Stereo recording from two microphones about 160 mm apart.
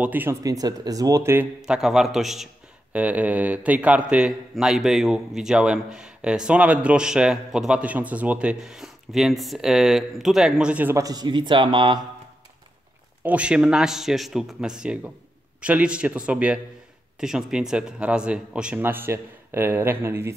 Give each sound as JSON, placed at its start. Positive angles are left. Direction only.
{"t": 0.0, "sound": "speech", "side_deg": -10}
{"t": 1.6, "sound": "a man's voice", "side_deg": -5}
{"t": 13.2, "sound": "a man's voice", "side_deg": -10}